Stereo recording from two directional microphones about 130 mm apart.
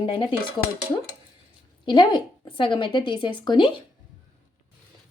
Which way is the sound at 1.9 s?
40° left (ahead or behind).